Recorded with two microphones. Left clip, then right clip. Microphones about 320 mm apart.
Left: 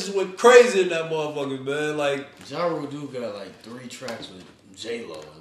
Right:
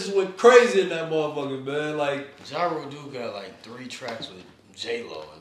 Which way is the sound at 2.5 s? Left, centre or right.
Right.